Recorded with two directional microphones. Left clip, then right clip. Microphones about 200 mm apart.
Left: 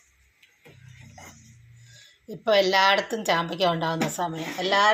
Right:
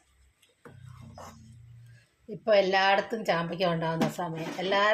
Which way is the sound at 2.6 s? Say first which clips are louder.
Left 4 dB; 20° left (ahead or behind).